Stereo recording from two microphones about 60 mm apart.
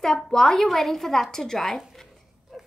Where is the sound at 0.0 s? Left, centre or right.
Centre.